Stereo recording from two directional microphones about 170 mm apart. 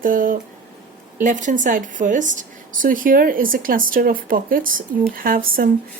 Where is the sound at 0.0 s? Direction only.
55° right (ahead or behind).